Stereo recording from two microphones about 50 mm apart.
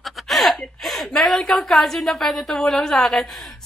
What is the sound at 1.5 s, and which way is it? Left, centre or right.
A woman's voice, centre.